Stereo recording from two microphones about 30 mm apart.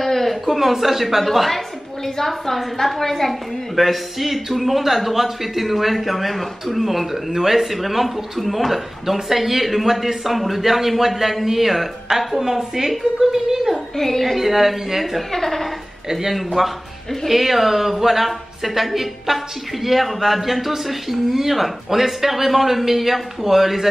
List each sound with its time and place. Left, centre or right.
0.0 s a sound: centre
0.5 s a man's voice: centre
2.0 s a woman's voice: centre
3.7 s a woman's voice: centre
13.9 s a woman's voice: centre
16.1 s a woman's voice: centre